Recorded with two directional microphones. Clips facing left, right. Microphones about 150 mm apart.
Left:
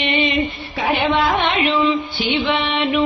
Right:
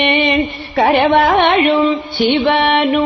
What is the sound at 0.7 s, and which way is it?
Carnatic music, 75° right (ahead or behind).